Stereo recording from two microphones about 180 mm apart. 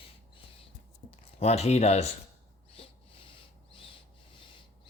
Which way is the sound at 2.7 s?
30° left (ahead or behind).